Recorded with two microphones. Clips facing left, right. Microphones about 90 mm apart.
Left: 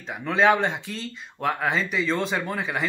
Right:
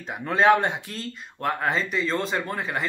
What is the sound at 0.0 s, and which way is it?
Speech, 5° right (ahead or behind).